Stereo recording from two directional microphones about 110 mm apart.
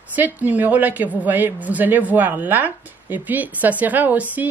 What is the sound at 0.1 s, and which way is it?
A woman's voice, 15° right (ahead or behind).